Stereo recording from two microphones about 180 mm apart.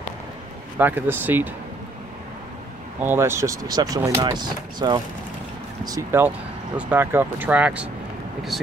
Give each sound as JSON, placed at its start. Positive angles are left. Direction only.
{"t": 0.7, "sound": "speech", "side_deg": -10}
{"t": 3.0, "sound": "speech", "side_deg": -15}